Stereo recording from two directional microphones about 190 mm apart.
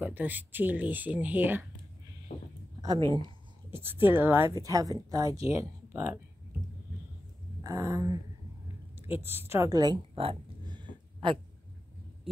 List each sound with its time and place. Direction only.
0.0 s speech: 10° right (ahead or behind)
2.3 s a sound: 50° left (ahead or behind)
2.8 s speech: 20° right (ahead or behind)
3.7 s speech: 10° right (ahead or behind)
7.6 s speech: 15° right (ahead or behind)
9.0 s a sound: 10° right (ahead or behind)